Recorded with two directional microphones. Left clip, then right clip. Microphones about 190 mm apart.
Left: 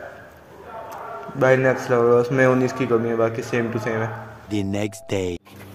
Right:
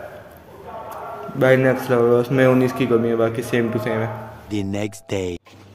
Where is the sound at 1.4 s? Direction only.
5° right (ahead or behind).